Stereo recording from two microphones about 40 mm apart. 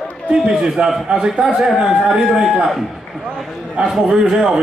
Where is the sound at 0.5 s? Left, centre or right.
Centre.